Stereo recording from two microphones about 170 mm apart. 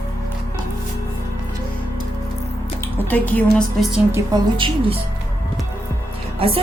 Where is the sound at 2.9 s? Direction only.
10° left (ahead or behind).